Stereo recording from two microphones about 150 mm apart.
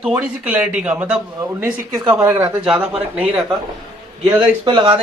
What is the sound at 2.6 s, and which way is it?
Speech, 5° right (ahead or behind).